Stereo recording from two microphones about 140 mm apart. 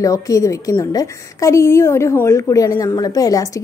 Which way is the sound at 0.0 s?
25° left (ahead or behind).